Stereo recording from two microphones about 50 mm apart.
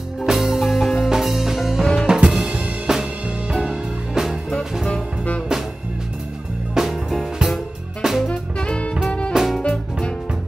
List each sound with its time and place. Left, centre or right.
0.3 s music: centre
2.0 s drum kit: centre
2.9 s music: centre
6.7 s music: centre
8.3 s music: centre
9.3 s music: centre